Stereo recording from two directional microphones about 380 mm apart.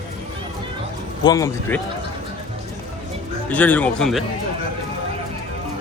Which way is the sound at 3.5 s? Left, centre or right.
Centre.